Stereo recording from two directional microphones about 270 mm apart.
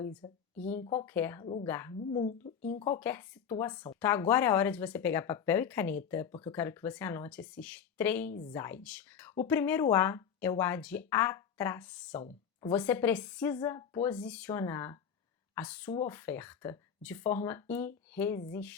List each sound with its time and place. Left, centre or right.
0.0 s a sound: centre
0.8 s speech: left
1.0 s speech: centre
2.0 s speech: left
3.0 s a woman's voice: centre